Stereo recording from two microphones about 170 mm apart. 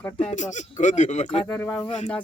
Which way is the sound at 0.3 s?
45° left (ahead or behind).